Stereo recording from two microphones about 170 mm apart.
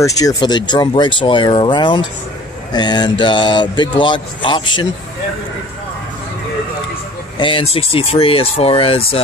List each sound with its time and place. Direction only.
0.0 s speech: 20° left (ahead or behind)
7.3 s speech: 30° left (ahead or behind)